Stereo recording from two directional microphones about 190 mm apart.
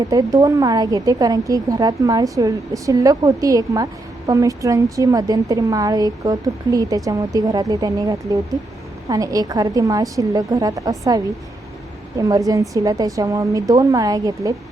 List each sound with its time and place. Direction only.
0.1 s a woman's voice: 20° right (ahead or behind)
12.3 s a woman's voice: 15° right (ahead or behind)